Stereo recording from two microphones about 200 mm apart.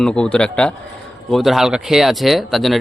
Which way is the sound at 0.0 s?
5° left (ahead or behind).